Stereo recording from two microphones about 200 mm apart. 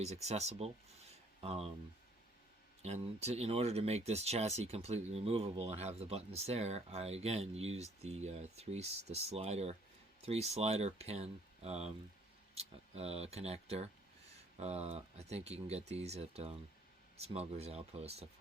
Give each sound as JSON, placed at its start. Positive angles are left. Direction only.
{"t": 0.0, "sound": "speech", "side_deg": -35}
{"t": 2.8, "sound": "speech", "side_deg": -30}